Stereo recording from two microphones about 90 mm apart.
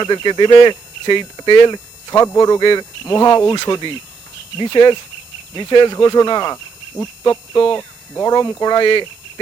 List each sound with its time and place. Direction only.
0.0 s speech: 55° left (ahead or behind)
8.1 s speech: 45° left (ahead or behind)